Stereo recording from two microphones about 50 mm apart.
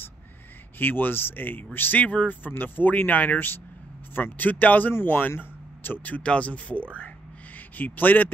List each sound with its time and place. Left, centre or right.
0.7 s speech: left
2.0 s speech: left
6.0 s a man's voice: left